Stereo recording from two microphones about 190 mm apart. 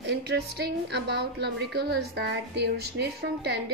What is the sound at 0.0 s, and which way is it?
A woman's voice, 60° right (ahead or behind).